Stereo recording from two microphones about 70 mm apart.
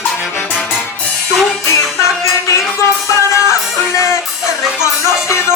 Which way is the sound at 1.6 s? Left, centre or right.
Left.